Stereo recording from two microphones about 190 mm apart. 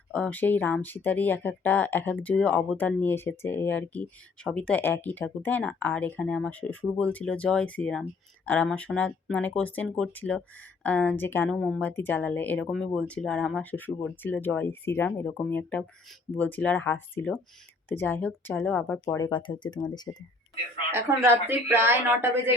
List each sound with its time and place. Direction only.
0.1 s speech: 5° left (ahead or behind)
20.9 s speech: 10° right (ahead or behind)